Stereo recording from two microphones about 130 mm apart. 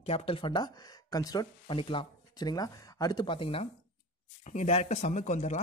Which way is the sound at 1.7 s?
40° left (ahead or behind).